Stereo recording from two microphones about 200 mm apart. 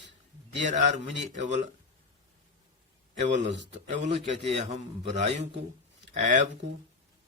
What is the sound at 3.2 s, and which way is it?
Speech, 35° right (ahead or behind).